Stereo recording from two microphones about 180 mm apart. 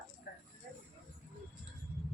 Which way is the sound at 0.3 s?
60° left (ahead or behind).